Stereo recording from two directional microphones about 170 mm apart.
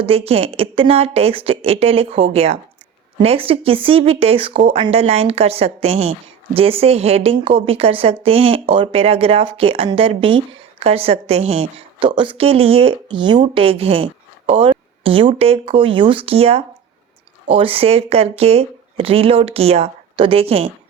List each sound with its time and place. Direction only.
0.0 s speech: 35° right (ahead or behind)